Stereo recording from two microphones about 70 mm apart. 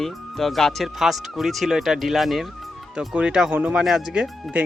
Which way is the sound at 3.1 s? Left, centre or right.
Centre.